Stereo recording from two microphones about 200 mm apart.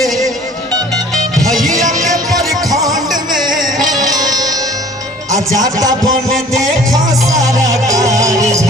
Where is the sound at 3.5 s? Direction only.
20° right (ahead or behind).